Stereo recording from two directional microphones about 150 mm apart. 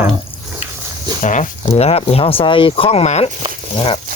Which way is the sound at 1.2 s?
55° left (ahead or behind).